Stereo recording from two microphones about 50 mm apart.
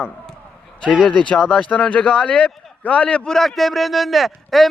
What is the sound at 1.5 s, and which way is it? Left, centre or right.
Speech, left.